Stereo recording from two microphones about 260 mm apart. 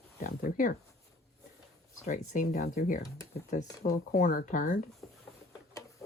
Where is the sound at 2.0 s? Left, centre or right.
Left.